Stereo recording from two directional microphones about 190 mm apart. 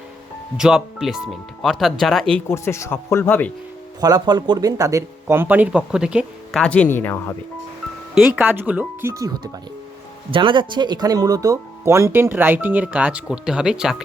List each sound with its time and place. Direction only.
0.5 s speech: 5° right (ahead or behind)
2.5 s speech: 15° left (ahead or behind)
4.0 s speech: 20° right (ahead or behind); by 7.3 s 10° left (ahead or behind)
8.1 s speech: 5° right (ahead or behind)